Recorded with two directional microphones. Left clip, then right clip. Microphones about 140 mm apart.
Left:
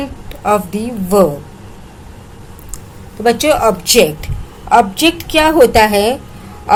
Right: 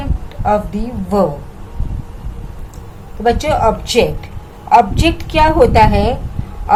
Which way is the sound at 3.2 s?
35° left (ahead or behind).